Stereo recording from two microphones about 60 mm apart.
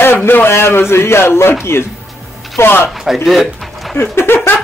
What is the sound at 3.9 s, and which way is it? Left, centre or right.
Speech, left.